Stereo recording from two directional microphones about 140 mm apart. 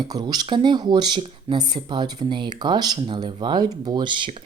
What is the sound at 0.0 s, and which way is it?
Speech, 30° right (ahead or behind).